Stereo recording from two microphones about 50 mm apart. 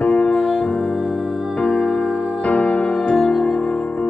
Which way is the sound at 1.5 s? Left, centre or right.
Centre.